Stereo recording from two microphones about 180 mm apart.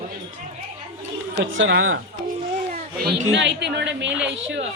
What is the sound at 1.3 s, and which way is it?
Speech, 90° right.